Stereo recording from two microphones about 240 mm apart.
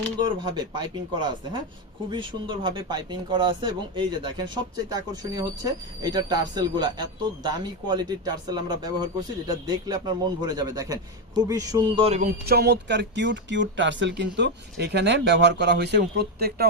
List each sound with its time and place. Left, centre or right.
0.2 s speech: centre
2.0 s speech: centre
12.5 s speech: right